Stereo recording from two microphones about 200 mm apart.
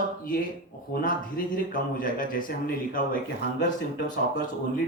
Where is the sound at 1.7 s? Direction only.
45° left (ahead or behind).